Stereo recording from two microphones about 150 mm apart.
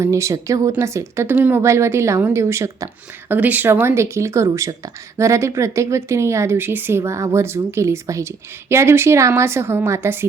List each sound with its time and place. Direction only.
0.0 s a woman's voice: 20° right (ahead or behind)